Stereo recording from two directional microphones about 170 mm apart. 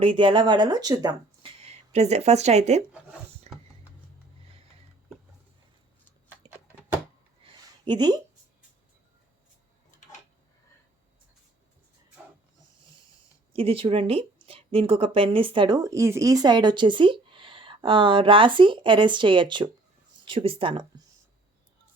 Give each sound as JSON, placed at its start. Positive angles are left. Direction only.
{"t": 0.0, "sound": "speech", "side_deg": -30}
{"t": 1.6, "sound": "speech", "side_deg": -40}
{"t": 3.5, "sound": "mechanisms", "side_deg": -40}
{"t": 7.4, "sound": "a sound", "side_deg": -25}
{"t": 13.5, "sound": "speech", "side_deg": -30}